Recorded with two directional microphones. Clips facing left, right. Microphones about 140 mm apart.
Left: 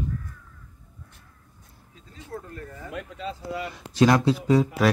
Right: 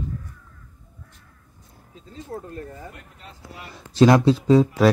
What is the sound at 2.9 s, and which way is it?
Speech, 90° left.